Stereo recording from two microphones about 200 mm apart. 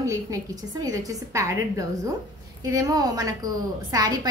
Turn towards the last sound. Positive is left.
turn(degrees=-20)  # may be behind; listen again after turning